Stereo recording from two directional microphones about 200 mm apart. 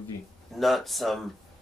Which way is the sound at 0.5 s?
Centre (ahead or behind).